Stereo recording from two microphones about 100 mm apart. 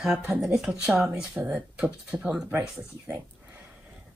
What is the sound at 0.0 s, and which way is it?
Speech, 10° right (ahead or behind).